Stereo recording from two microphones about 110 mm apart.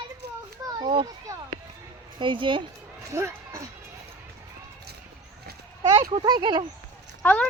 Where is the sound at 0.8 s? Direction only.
50° right (ahead or behind).